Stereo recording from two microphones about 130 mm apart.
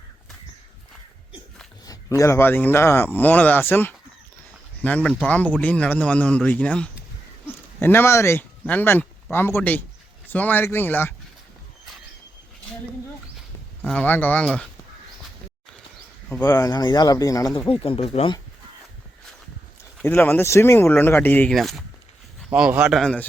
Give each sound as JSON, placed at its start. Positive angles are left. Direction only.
{"t": 1.8, "sound": "a man's voice", "side_deg": 25}
{"t": 13.8, "sound": "a man's voice", "side_deg": 10}
{"t": 16.4, "sound": "speech", "side_deg": 25}
{"t": 17.7, "sound": "speech", "side_deg": 45}
{"t": 20.0, "sound": "a man's voice", "side_deg": 15}
{"t": 21.5, "sound": "speech", "side_deg": 0}
{"t": 23.0, "sound": "speech", "side_deg": 5}